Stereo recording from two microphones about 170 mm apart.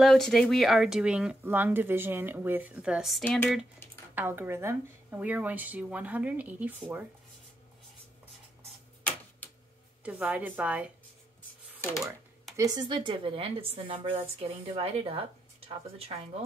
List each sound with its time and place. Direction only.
0.0 s speech: centre (ahead or behind)
4.1 s speech: 10° right (ahead or behind)
10.0 s speech: 5° right (ahead or behind)
12.5 s speech: 20° right (ahead or behind)